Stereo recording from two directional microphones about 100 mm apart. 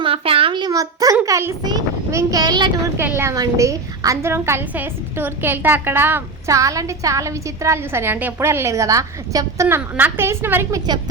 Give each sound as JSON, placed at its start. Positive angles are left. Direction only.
{"t": 0.0, "sound": "a sound", "side_deg": -70}
{"t": 0.7, "sound": "a woman's voice", "side_deg": -35}
{"t": 1.6, "sound": "a sound", "side_deg": -45}
{"t": 2.1, "sound": "speech", "side_deg": -40}
{"t": 3.3, "sound": "a woman's voice", "side_deg": -35}
{"t": 6.5, "sound": "a woman's voice", "side_deg": -35}
{"t": 9.6, "sound": "a woman's voice", "side_deg": -25}
{"t": 10.7, "sound": "speech", "side_deg": -45}